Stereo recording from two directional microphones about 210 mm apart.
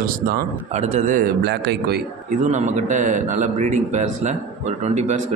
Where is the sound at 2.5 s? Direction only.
35° right (ahead or behind).